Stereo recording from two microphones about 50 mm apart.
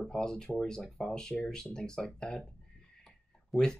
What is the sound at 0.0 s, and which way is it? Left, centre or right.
Speech, centre.